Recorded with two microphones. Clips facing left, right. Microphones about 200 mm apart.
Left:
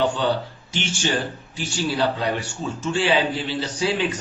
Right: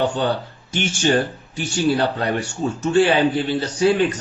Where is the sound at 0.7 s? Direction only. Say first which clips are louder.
Right 6 dB; 50° right (ahead or behind).